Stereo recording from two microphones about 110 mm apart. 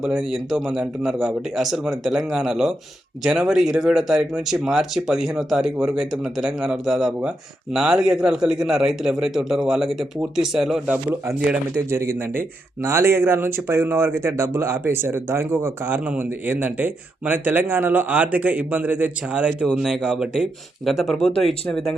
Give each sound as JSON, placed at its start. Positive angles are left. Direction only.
{"t": 0.0, "sound": "speech", "side_deg": -5}
{"t": 10.9, "sound": "speech", "side_deg": -20}